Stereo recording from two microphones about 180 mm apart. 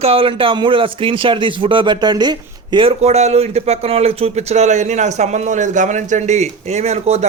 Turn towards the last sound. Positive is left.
turn(degrees=-35)  # may be behind; listen again after turning